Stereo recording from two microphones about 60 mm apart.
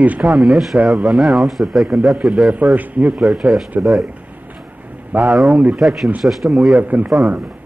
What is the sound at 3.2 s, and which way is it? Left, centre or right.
Speech, centre.